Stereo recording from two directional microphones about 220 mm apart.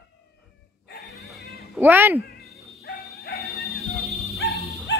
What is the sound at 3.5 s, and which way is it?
Music, centre (ahead or behind).